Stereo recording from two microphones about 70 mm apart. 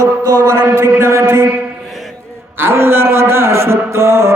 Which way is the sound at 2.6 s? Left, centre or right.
Right.